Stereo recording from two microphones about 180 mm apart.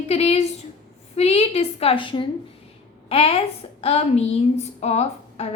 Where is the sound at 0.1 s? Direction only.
35° left (ahead or behind).